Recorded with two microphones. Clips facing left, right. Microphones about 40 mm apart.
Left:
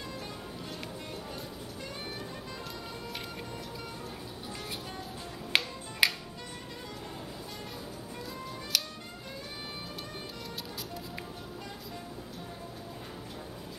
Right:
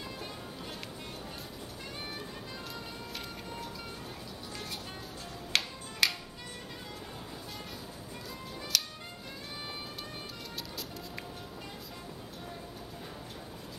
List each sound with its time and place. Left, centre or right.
5.5 s music: centre
8.7 s music: centre